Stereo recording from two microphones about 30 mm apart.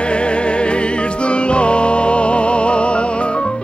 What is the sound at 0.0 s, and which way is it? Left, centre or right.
Music, left.